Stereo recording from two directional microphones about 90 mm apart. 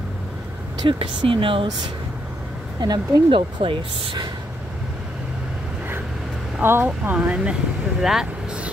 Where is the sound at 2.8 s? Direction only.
60° right (ahead or behind).